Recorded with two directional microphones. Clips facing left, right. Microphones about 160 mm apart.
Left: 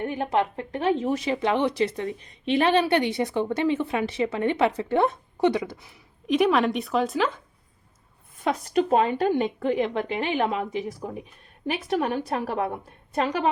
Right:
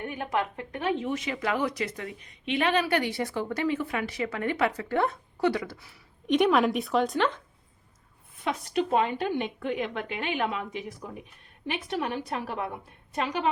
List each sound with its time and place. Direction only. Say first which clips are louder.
0.0 s a woman's voice: left 5 dB; 30° left (ahead or behind)
6.2 s a woman's voice: left 1 dB; centre (ahead or behind)
8.4 s a woman's voice: left 5 dB; 40° left (ahead or behind)